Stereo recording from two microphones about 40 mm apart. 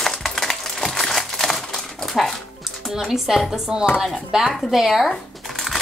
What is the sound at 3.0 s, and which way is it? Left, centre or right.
Speech, centre.